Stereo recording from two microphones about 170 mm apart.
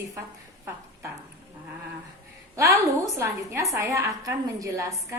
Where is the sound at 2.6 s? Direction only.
15° right (ahead or behind).